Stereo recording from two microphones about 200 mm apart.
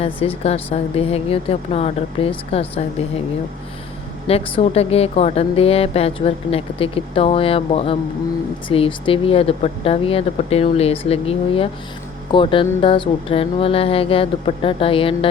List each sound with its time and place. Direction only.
0.0 s a woman's voice: 30° left (ahead or behind)
4.3 s a woman's voice: 30° left (ahead or behind)